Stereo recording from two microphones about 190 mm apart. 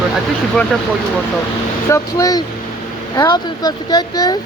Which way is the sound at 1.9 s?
20° left (ahead or behind).